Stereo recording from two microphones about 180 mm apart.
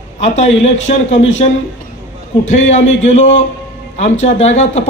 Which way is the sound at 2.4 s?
40° left (ahead or behind).